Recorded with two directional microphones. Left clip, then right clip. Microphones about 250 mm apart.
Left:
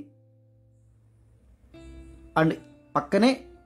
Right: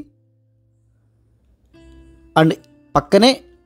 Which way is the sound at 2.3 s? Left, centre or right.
Right.